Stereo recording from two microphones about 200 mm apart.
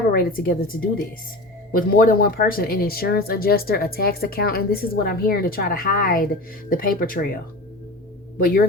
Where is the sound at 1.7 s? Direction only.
45° left (ahead or behind).